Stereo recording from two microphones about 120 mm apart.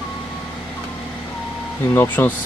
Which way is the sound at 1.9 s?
15° left (ahead or behind).